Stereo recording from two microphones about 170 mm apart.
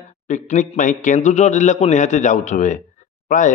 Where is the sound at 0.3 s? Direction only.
45° left (ahead or behind).